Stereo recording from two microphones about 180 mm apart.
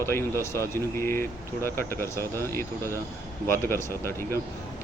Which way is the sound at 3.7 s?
15° left (ahead or behind).